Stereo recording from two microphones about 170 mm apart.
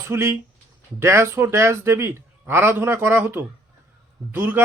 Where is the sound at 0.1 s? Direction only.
15° right (ahead or behind).